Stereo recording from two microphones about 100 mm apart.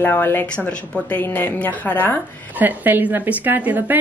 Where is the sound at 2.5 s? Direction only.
15° right (ahead or behind).